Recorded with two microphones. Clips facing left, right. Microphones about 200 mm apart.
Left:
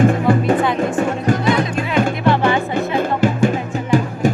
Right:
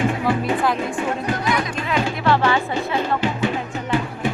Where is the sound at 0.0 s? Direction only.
45° left (ahead or behind).